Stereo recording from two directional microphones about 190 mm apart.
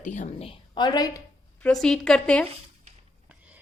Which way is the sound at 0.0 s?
40° left (ahead or behind).